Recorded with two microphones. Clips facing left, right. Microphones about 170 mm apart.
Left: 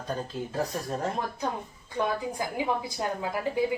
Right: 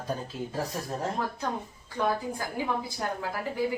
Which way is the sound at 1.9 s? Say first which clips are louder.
Even; 15° left (ahead or behind).